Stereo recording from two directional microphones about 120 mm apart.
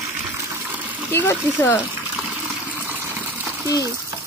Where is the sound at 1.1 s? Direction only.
20° left (ahead or behind).